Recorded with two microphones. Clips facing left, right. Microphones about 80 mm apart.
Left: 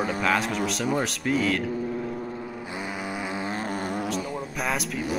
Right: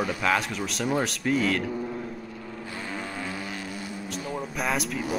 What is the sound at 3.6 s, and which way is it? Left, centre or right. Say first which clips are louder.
Vehicle: left 7 dB; left.